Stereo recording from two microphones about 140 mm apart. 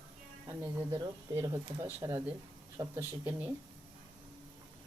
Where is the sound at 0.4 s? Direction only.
20° right (ahead or behind).